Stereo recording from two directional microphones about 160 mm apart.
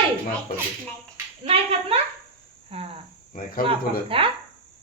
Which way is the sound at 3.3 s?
65° left (ahead or behind).